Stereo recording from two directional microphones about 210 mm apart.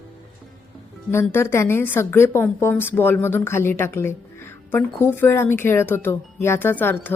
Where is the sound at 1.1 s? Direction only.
10° left (ahead or behind).